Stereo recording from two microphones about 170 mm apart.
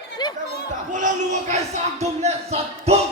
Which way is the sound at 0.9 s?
45° right (ahead or behind).